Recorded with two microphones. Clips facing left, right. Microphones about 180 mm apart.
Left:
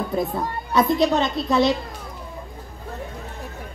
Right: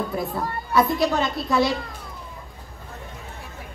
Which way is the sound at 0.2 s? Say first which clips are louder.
Left 2 dB; 20° left (ahead or behind).